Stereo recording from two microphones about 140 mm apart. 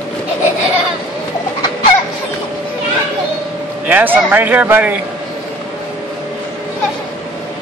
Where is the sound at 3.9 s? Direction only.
15° right (ahead or behind).